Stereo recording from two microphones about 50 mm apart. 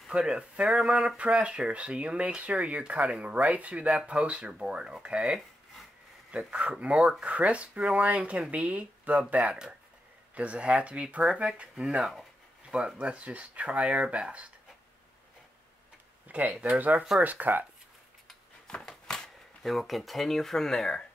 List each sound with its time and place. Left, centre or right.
0.1 s speech: centre
12.7 s speech: right
16.3 s a sound: right
16.6 s speech: right
18.7 s a sound: centre
19.6 s speech: centre